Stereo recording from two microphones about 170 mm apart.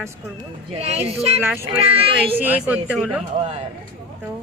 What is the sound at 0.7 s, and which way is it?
Speech, 40° right (ahead or behind).